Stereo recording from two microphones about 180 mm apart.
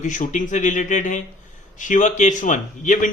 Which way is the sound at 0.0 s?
45° left (ahead or behind).